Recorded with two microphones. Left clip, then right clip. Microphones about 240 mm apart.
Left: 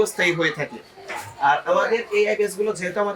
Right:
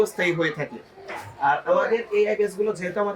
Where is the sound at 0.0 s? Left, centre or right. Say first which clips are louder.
Left 2 dB; centre.